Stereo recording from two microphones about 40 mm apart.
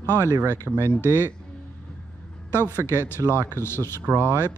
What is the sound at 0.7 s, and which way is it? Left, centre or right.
Speech, right.